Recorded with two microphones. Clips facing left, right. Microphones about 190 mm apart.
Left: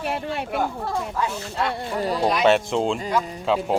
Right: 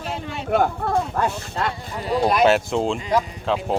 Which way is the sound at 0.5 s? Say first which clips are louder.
Right 8 dB; 55° right (ahead or behind).